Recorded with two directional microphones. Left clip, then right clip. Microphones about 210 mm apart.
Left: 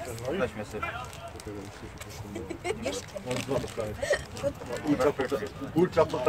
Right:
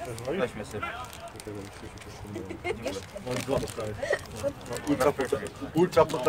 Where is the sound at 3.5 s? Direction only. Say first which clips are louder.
Right 2 dB; 30° right (ahead or behind).